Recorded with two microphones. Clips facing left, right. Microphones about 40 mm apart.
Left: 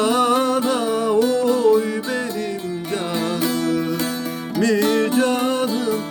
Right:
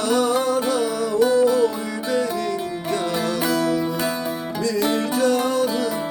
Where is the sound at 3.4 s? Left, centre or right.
Left.